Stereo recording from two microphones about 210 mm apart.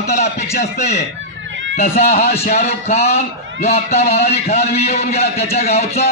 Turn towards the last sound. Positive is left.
turn(degrees=30)  # may be behind; listen again after turning